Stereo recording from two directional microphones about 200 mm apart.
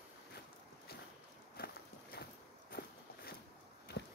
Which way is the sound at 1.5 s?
50° left (ahead or behind).